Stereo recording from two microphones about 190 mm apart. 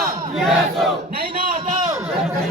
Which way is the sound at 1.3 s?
25° right (ahead or behind).